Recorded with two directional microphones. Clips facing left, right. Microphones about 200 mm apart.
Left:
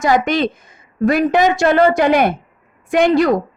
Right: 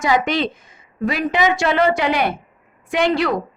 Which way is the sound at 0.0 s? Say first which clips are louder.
Left 3 dB; 45° left (ahead or behind).